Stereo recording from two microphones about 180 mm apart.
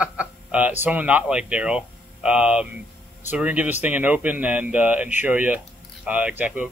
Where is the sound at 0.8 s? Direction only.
10° right (ahead or behind).